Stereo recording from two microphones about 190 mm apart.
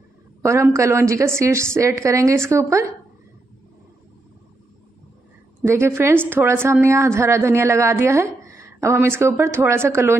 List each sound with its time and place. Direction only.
0.4 s a woman's voice: 15° right (ahead or behind)
5.7 s a woman's voice: 15° right (ahead or behind)